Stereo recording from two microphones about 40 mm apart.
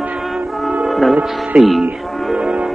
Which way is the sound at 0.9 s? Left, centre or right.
Centre.